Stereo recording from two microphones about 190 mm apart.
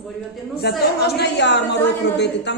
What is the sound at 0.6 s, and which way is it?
A woman's voice, 60° left (ahead or behind).